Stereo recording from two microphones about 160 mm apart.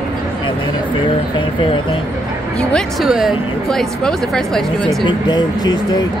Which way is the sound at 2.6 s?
5° left (ahead or behind).